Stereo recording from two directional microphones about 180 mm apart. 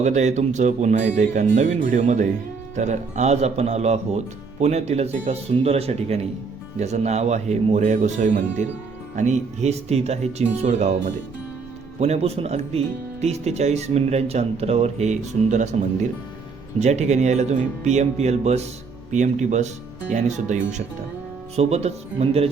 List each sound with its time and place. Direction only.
0.0 s speech: 40° right (ahead or behind)
16.8 s speech: 40° right (ahead or behind)